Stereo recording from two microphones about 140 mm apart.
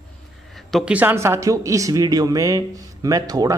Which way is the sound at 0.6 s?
Centre (ahead or behind).